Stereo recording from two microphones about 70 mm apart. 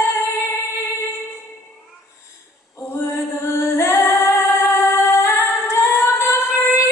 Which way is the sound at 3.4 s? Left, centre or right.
Left.